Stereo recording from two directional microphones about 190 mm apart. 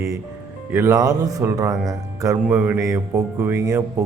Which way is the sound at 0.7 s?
15° right (ahead or behind).